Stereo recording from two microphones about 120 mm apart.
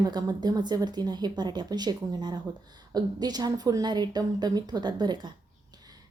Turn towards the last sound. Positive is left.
turn(degrees=-35)  # may be behind; listen again after turning